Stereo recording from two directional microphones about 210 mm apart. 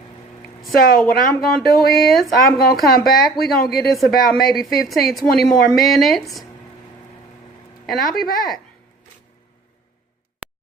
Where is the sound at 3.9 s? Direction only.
Centre (ahead or behind).